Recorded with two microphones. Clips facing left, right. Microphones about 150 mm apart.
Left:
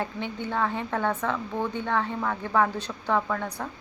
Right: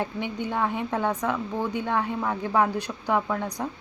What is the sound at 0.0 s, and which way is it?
Speech, 15° right (ahead or behind).